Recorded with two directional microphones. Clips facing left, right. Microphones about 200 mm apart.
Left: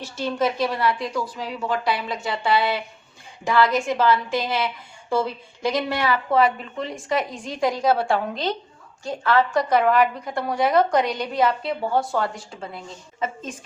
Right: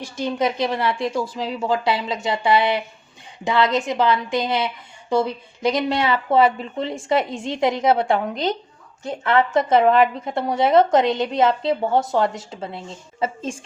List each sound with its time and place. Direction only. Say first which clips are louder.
0.0 s a woman's voice: right 1 dB; 15° right (ahead or behind)